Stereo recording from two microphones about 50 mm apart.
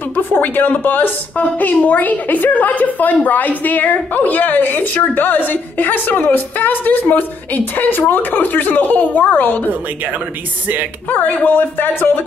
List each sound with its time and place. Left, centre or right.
0.1 s a woman's voice: left
11.1 s a woman's voice: left